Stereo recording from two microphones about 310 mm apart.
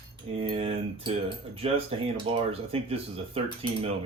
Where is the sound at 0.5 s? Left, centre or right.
Centre.